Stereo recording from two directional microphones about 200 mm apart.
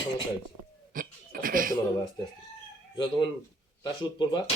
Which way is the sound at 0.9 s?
45° right (ahead or behind).